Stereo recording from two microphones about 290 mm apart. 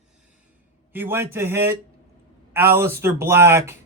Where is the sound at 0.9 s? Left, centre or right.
Centre.